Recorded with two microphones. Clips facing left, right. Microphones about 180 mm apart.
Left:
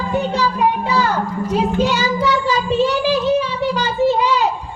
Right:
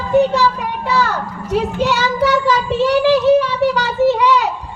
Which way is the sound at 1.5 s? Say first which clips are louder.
Right 1 dB; 70° right (ahead or behind).